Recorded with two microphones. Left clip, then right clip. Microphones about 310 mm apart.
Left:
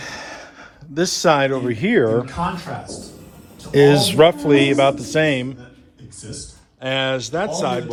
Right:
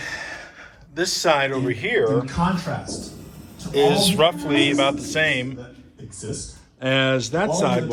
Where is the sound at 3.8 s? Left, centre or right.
Left.